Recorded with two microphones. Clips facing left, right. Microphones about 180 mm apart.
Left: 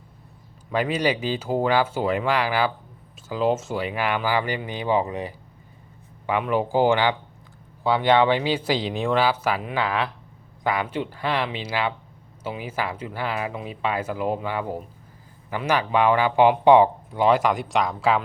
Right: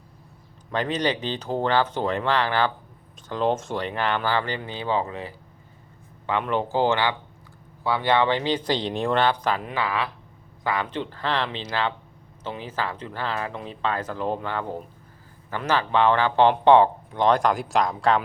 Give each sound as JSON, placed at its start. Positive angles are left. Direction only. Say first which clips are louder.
{"t": 0.7, "sound": "speech", "louder": "left 2 dB", "side_deg": 10}